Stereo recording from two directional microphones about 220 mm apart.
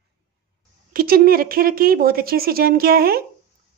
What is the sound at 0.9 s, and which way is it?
Speech, 40° right (ahead or behind).